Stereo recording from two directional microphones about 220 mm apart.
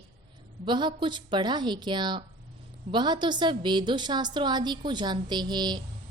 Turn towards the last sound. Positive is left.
turn(degrees=-20)  # may be behind; listen again after turning